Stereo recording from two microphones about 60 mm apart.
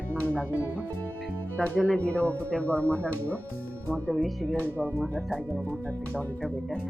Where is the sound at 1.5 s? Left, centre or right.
Left.